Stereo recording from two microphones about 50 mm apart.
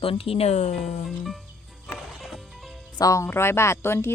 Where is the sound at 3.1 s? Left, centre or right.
Left.